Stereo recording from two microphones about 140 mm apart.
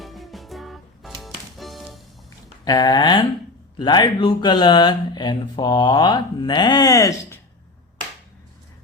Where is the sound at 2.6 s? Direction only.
30° left (ahead or behind).